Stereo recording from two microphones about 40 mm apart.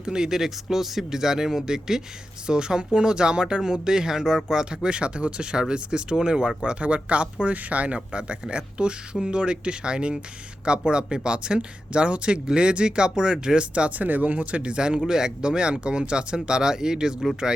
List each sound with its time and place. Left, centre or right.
0.0 s speech: centre